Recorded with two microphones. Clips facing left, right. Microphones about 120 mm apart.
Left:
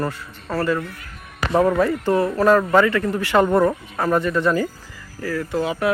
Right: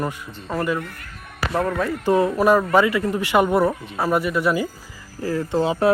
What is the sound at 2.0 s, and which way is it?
Speech, 20° right (ahead or behind).